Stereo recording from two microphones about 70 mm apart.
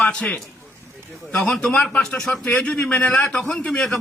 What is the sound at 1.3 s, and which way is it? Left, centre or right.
A man's voice, centre.